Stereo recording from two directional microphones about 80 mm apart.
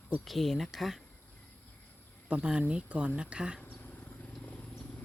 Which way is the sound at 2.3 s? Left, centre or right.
Centre.